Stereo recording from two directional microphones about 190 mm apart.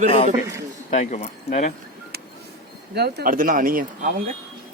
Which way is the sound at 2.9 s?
60° right (ahead or behind).